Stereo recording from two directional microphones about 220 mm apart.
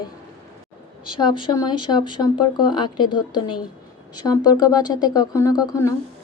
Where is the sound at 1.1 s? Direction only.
20° left (ahead or behind).